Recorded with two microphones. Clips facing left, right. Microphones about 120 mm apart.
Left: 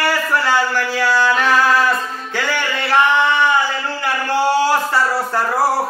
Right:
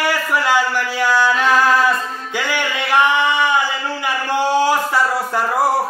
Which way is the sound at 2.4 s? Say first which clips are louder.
Even; 10° right (ahead or behind).